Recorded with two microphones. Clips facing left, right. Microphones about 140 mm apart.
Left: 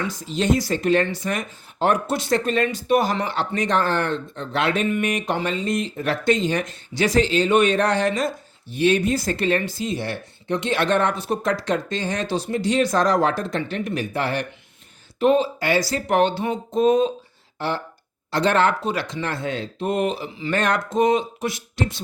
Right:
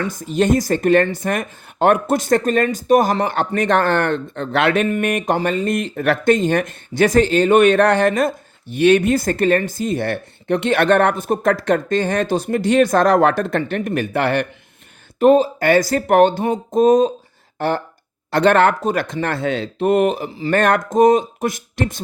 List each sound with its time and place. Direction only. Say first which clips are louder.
0.0 s speech: right 6 dB; 50° right (ahead or behind)
4.9 s speech: right 4 dB; 50° right (ahead or behind)
8.7 s speech: right 6 dB; 65° right (ahead or behind)
15.2 s speech: right 6 dB; 45° right (ahead or behind)